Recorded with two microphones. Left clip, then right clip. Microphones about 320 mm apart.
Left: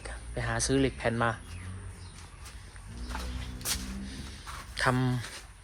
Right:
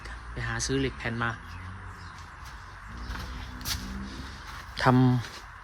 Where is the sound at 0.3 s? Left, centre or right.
Centre.